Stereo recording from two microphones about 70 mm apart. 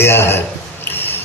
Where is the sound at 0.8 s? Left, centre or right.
Left.